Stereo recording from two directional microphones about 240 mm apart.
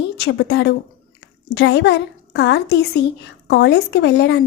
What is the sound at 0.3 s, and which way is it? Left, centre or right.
Speech, left.